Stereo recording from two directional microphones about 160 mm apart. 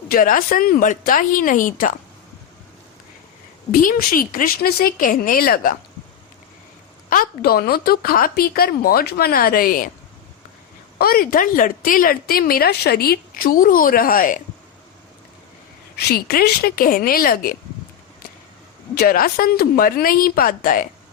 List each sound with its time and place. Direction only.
0.1 s a woman's voice: 60° left (ahead or behind)
3.7 s a woman's voice: 60° left (ahead or behind)
7.1 s speech: 65° left (ahead or behind)
10.9 s a woman's voice: 70° left (ahead or behind)
16.0 s speech: 75° left (ahead or behind)
18.9 s a woman's voice: 70° left (ahead or behind)